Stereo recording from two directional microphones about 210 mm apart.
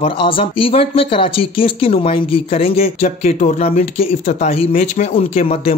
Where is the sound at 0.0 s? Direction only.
25° left (ahead or behind).